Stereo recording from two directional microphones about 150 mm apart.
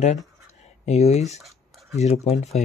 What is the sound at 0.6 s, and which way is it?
Speech, 50° left (ahead or behind).